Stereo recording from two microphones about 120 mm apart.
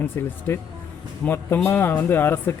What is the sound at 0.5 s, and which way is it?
Speech, 20° left (ahead or behind).